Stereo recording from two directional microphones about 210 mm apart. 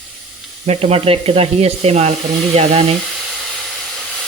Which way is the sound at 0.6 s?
30° right (ahead or behind).